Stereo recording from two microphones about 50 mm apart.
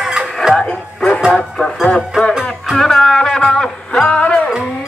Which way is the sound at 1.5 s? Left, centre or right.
Centre.